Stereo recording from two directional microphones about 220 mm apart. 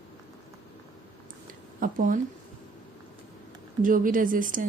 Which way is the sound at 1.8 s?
40° right (ahead or behind).